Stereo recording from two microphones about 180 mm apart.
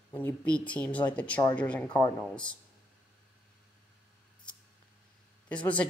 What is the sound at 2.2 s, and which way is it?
Speech, 5° left (ahead or behind).